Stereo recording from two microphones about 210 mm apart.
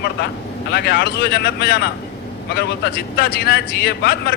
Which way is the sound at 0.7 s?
50° left (ahead or behind).